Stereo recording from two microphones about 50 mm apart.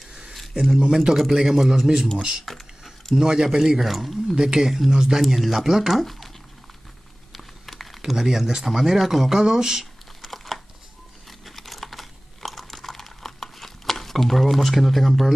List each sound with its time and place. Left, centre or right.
0.0 s a man's voice: centre
2.4 s typing: centre
3.2 s speech: centre
4.4 s speech: centre
7.3 s crumpling: centre
8.0 s speech: centre
10.2 s crumpling: centre
11.2 s computer keyboard: centre